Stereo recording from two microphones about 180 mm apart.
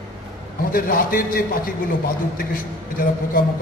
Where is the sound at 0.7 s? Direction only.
55° left (ahead or behind).